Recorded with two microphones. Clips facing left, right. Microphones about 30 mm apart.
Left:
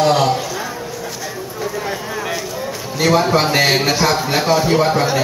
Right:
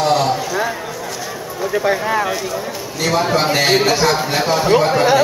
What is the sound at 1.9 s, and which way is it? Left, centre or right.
Speech, right.